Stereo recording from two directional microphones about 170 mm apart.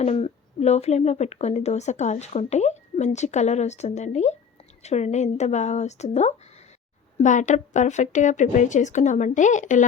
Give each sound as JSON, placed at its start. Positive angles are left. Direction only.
{"t": 0.0, "sound": "a woman's voice", "side_deg": 35}